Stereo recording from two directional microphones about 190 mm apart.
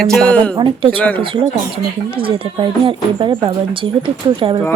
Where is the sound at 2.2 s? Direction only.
25° right (ahead or behind).